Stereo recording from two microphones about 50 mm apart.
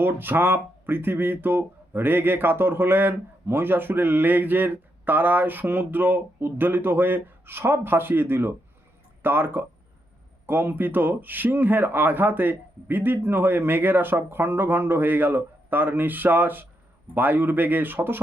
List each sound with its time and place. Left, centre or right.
0.0 s speech: right